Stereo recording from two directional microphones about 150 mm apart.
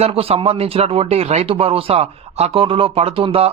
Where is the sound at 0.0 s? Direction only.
40° right (ahead or behind).